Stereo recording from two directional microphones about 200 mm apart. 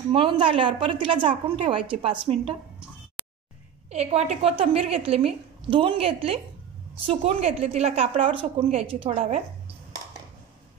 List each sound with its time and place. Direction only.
0.1 s a woman's voice: 25° right (ahead or behind)
3.2 s a sound: 5° right (ahead or behind)
3.9 s a woman's voice: 30° right (ahead or behind)